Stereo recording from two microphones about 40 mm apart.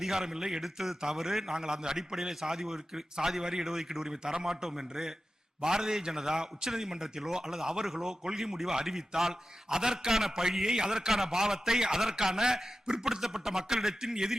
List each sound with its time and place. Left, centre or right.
0.0 s a man's voice: centre